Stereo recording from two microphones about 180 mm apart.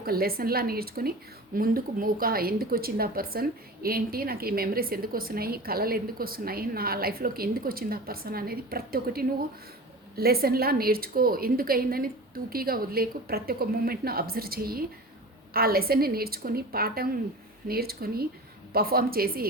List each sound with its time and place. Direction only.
0.0 s a woman's voice: 55° right (ahead or behind)